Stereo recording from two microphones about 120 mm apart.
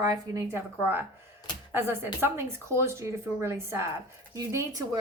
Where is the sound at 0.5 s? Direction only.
20° right (ahead or behind).